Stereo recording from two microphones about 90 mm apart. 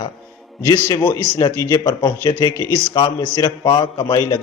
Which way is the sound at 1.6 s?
40° left (ahead or behind).